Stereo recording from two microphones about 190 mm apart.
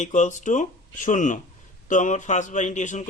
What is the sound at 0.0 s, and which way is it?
Speech, 40° left (ahead or behind).